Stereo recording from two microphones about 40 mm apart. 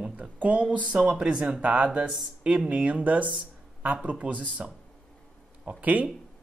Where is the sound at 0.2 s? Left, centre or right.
Right.